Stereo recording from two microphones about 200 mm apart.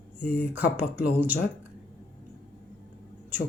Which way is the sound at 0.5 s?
10° right (ahead or behind).